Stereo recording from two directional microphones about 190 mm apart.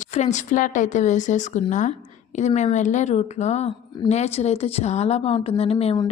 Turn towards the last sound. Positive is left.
turn(degrees=30)  # may be behind; listen again after turning